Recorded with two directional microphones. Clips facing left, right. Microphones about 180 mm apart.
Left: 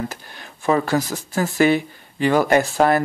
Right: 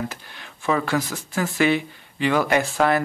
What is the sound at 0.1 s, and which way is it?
Speech, 40° left (ahead or behind).